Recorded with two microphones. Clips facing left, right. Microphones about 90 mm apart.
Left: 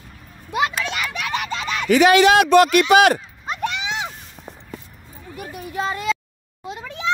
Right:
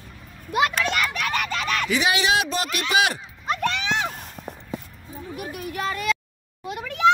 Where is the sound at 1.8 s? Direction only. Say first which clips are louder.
Left 11 dB; 50° left (ahead or behind).